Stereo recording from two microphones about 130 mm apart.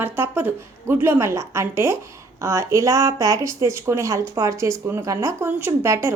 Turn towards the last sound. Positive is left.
turn(degrees=-20)  # may be behind; listen again after turning